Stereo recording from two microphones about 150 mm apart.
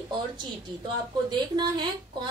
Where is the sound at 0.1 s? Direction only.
30° right (ahead or behind).